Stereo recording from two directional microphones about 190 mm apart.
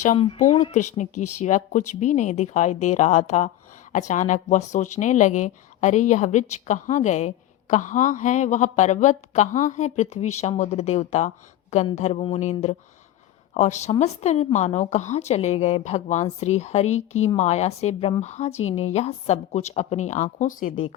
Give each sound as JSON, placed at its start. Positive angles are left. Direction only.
{"t": 0.2, "sound": "a woman's voice", "side_deg": 35}